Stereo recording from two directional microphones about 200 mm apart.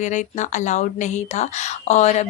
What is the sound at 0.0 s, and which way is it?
Speech, 35° left (ahead or behind).